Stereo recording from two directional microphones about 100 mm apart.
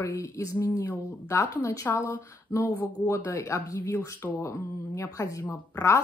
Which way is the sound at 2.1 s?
20° left (ahead or behind).